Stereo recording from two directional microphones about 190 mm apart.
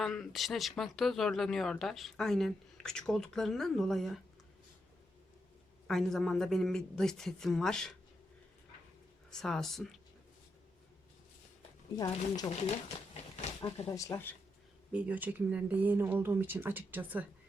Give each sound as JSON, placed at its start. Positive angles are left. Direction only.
{"t": 0.0, "sound": "speech", "side_deg": 0}
{"t": 5.9, "sound": "speech", "side_deg": 0}
{"t": 9.3, "sound": "speech", "side_deg": 5}
{"t": 11.9, "sound": "speech", "side_deg": 20}
{"t": 13.3, "sound": "a sound", "side_deg": 35}
{"t": 14.0, "sound": "speech", "side_deg": 15}
{"t": 14.9, "sound": "speech", "side_deg": -10}